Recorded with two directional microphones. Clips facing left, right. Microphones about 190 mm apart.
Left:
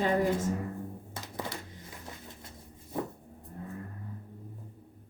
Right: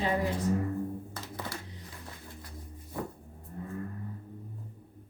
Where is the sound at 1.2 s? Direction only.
20° left (ahead or behind).